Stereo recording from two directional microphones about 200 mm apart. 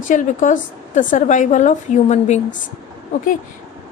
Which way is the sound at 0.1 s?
40° left (ahead or behind).